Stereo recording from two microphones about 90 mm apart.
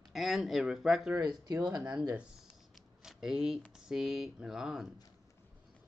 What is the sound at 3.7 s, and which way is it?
Speech, 5° right (ahead or behind).